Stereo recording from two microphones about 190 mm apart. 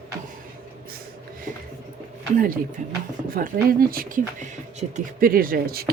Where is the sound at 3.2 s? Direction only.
50° right (ahead or behind).